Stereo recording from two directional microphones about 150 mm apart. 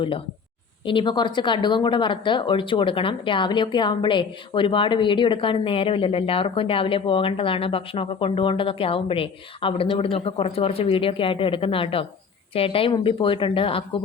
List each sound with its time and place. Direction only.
0.9 s speech: 30° left (ahead or behind)